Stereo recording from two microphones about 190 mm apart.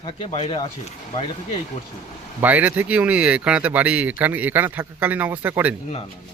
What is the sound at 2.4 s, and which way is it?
Speech, 10° right (ahead or behind).